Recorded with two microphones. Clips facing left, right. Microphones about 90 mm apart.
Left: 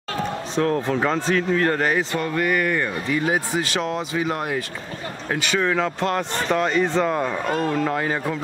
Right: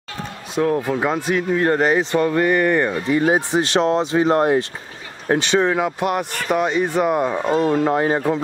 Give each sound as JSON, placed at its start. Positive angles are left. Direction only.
{"t": 0.6, "sound": "speech", "side_deg": -15}